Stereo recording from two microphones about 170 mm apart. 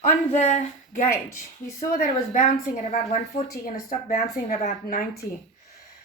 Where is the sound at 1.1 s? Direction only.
15° left (ahead or behind).